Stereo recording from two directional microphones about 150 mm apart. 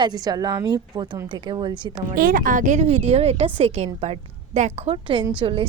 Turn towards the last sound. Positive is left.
turn(degrees=-35)  # may be behind; listen again after turning